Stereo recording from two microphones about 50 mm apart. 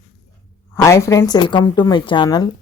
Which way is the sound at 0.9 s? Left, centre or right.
Left.